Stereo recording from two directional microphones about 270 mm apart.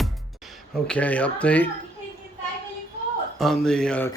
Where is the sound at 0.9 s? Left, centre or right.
Centre.